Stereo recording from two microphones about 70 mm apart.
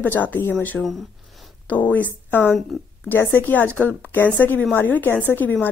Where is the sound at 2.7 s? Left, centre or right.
Centre.